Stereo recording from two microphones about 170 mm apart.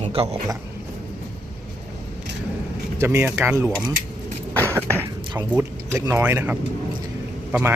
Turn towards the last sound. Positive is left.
turn(degrees=-10)  # may be behind; listen again after turning